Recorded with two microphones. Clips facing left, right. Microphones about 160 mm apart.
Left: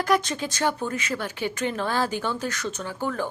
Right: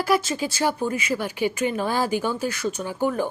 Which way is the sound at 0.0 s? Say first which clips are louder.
Right 1 dB; 5° right (ahead or behind).